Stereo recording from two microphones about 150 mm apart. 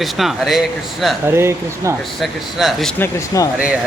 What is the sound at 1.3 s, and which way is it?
Speech, 15° right (ahead or behind).